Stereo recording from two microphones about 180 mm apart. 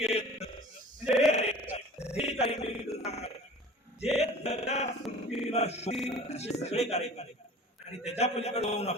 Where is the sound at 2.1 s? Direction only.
35° left (ahead or behind).